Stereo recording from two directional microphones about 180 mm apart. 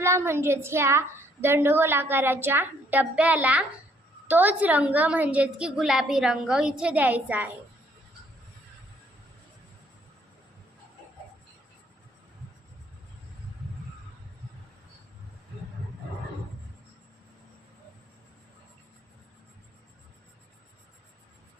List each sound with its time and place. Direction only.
0.0 s a woman's voice: 15° right (ahead or behind)